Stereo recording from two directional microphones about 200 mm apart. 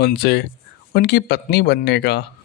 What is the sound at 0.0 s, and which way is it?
Speech, 55° left (ahead or behind).